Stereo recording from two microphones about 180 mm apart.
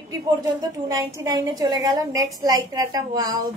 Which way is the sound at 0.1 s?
20° right (ahead or behind).